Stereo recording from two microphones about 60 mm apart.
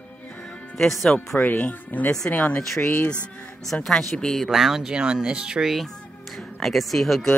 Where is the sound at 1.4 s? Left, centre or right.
Left.